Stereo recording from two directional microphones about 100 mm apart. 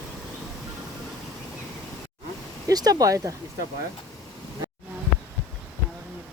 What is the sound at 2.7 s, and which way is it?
Speech, 40° right (ahead or behind).